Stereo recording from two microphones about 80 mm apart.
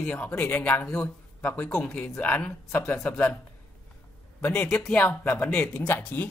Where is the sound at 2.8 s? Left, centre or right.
Left.